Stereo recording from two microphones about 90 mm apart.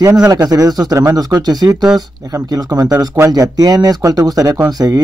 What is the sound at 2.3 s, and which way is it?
Speech, 35° right (ahead or behind).